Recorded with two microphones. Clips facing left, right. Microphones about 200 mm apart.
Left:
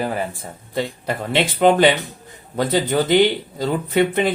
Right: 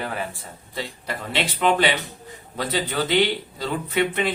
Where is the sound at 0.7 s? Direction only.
55° left (ahead or behind).